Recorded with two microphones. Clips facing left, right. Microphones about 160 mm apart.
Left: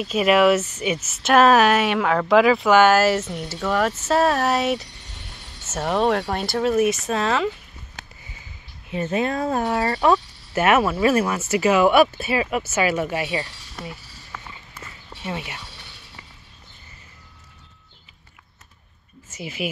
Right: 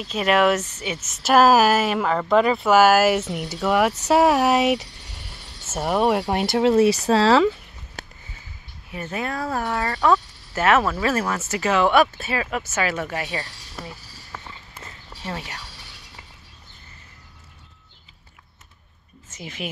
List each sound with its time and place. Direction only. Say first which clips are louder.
0.0 s speech: left 2 dB; 10° left (ahead or behind); by 7.4 s 30° right (ahead or behind)
8.9 s speech: left 5 dB; 20° left (ahead or behind)
15.2 s speech: left 2 dB; 10° left (ahead or behind)
19.3 s speech: left 4 dB; 10° left (ahead or behind)